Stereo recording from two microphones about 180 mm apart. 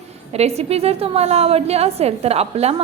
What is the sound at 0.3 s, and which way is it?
A woman's voice, 35° right (ahead or behind).